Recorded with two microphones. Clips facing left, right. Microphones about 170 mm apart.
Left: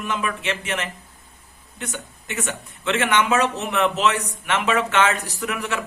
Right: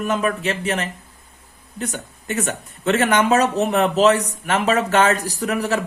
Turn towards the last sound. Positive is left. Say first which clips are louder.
# right 5 dB
turn(degrees=-40)  # may be behind; listen again after turning